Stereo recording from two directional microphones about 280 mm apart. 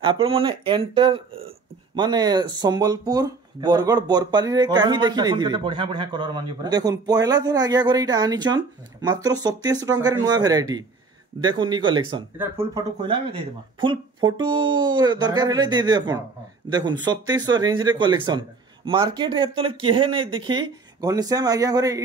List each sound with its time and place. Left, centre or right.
0.0 s speech: centre